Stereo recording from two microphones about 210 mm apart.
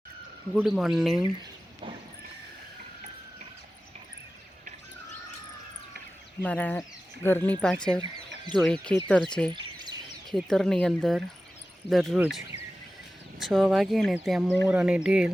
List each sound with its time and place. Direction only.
0.5 s speech: centre (ahead or behind)
1.4 s a sound: 25° right (ahead or behind)
6.4 s speech: 5° left (ahead or behind)
9.5 s a sound: 20° right (ahead or behind)
10.3 s speech: centre (ahead or behind)
13.4 s speech: centre (ahead or behind)